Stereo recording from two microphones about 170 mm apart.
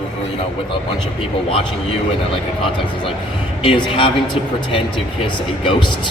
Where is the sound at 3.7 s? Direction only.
30° left (ahead or behind).